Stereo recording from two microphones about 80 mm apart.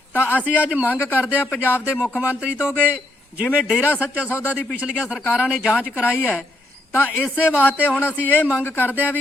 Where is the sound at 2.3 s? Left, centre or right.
Centre.